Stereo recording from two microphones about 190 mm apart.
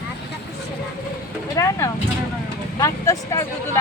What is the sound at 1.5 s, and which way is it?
Speech, 15° left (ahead or behind).